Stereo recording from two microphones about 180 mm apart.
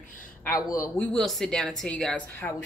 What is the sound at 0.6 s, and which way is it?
Speech, 20° left (ahead or behind).